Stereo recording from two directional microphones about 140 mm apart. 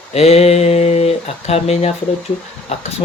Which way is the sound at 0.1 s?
50° left (ahead or behind).